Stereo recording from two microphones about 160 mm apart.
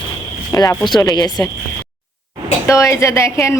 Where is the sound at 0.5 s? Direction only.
25° left (ahead or behind).